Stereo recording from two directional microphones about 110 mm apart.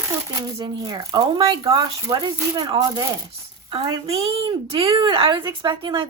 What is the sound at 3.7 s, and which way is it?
A child's voice, 55° right (ahead or behind).